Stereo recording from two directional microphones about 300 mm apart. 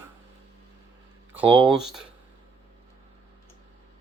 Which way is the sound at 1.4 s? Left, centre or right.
Centre.